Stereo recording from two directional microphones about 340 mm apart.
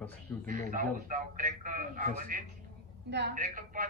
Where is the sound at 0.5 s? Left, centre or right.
Right.